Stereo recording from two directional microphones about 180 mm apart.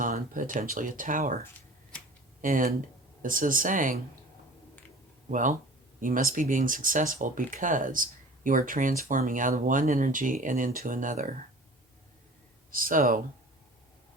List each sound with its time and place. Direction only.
0.0 s speech: 50° right (ahead or behind)
2.4 s speech: 50° right (ahead or behind)
5.3 s speech: 45° right (ahead or behind)
12.7 s speech: 50° right (ahead or behind)